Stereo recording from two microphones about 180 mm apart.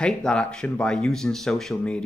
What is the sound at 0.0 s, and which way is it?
Speech, 5° left (ahead or behind).